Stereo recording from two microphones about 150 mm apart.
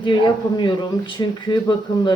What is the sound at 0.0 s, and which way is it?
Speech, 30° left (ahead or behind).